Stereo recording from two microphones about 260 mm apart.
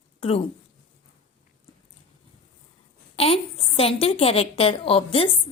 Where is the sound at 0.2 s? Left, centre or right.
Left.